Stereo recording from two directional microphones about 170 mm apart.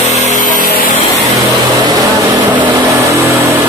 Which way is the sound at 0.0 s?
40° left (ahead or behind).